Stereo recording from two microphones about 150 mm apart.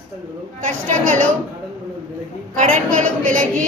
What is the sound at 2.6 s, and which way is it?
Speech, 60° right (ahead or behind).